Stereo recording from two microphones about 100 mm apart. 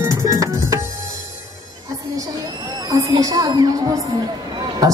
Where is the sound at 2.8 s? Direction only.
40° right (ahead or behind).